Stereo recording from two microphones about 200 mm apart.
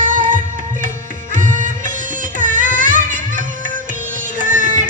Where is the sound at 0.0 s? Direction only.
40° right (ahead or behind).